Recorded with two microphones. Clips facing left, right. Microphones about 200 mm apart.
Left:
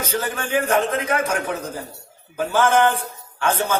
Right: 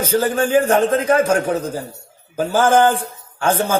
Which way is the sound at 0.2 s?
30° right (ahead or behind).